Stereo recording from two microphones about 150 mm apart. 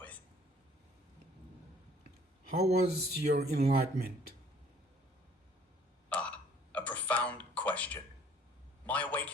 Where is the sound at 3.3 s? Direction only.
90° right.